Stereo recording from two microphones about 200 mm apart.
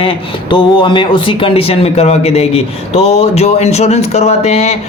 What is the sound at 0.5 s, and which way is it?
Speech, 25° left (ahead or behind).